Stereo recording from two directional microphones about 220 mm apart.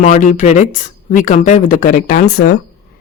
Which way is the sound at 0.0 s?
35° left (ahead or behind).